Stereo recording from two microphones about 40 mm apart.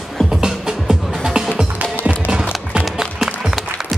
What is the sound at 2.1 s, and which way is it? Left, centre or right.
Music, right.